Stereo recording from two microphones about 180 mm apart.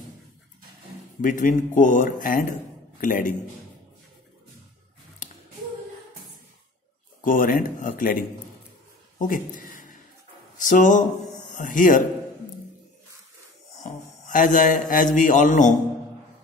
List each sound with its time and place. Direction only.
1.2 s speech: 45° left (ahead or behind)
5.2 s a sound: 45° left (ahead or behind)
7.2 s speech: 50° left (ahead or behind)
9.2 s a sound: 50° left (ahead or behind)
10.6 s speech: 45° left (ahead or behind)
13.8 s a man's voice: 45° left (ahead or behind)